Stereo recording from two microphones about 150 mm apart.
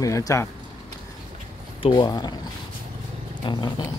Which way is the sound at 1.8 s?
30° left (ahead or behind).